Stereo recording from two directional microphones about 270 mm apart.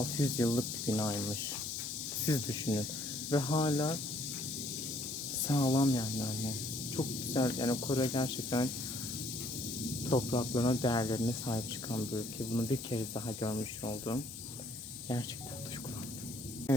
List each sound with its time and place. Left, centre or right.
0.0 s speech: centre
5.5 s speech: centre
10.0 s speech: centre